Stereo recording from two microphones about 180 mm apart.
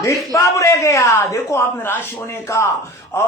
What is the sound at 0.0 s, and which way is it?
A man's voice, 15° left (ahead or behind).